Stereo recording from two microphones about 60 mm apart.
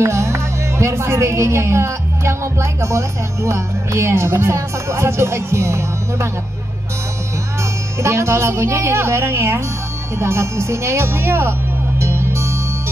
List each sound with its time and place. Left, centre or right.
0.0 s speech: right
8.0 s speech: right
12.0 s music: right